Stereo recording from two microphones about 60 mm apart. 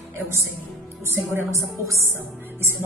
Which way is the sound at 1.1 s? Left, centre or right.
Right.